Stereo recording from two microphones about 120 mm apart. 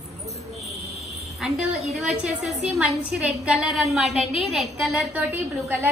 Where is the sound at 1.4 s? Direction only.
5° right (ahead or behind).